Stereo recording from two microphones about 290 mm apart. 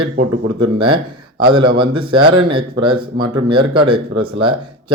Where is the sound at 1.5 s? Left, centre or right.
Centre.